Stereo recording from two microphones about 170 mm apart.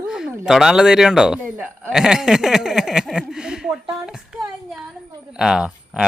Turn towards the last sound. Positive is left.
turn(degrees=-5)  # may be behind; listen again after turning